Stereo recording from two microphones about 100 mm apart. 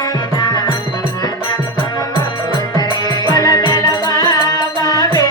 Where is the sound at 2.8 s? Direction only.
40° left (ahead or behind).